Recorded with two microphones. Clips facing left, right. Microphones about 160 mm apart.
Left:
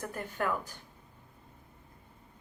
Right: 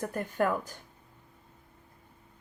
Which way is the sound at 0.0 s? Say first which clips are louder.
Right 5 dB; 45° right (ahead or behind).